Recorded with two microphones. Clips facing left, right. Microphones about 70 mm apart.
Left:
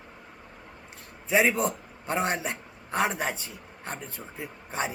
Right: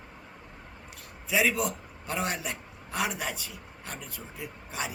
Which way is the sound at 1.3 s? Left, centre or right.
Left.